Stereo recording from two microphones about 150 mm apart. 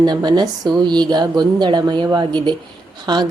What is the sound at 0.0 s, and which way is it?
Speech, 30° right (ahead or behind).